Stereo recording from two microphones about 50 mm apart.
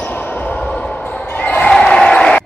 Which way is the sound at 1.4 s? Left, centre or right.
Left.